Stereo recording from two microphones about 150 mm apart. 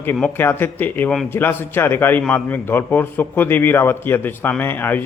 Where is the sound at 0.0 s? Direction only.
15° left (ahead or behind).